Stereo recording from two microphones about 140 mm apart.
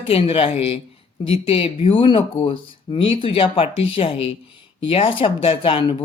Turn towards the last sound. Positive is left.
turn(degrees=40)  # may be behind; listen again after turning